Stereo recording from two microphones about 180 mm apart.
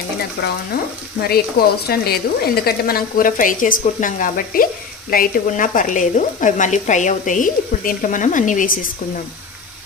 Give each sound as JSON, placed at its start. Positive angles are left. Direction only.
{"t": 0.4, "sound": "frying", "side_deg": 65}
{"t": 1.6, "sound": "speech", "side_deg": 60}